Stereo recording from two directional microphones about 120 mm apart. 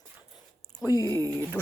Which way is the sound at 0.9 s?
30° right (ahead or behind).